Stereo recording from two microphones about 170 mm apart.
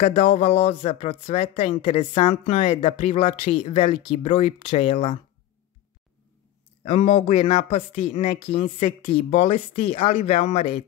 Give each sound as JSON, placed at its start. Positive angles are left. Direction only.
{"t": 0.0, "sound": "speech", "side_deg": 40}
{"t": 6.8, "sound": "speech", "side_deg": 40}